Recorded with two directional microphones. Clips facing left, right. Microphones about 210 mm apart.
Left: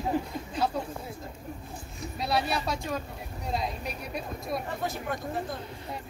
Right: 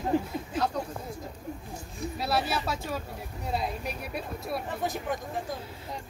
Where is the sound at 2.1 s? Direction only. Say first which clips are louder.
Left 1 dB; 5° right (ahead or behind).